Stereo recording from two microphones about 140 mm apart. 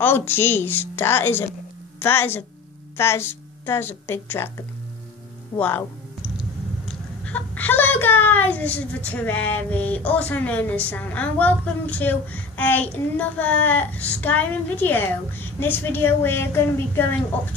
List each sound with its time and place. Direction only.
0.0 s a child's voice: 15° left (ahead or behind)
6.9 s a child's voice: 10° left (ahead or behind)